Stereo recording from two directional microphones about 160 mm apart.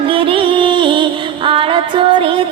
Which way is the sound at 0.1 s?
35° right (ahead or behind).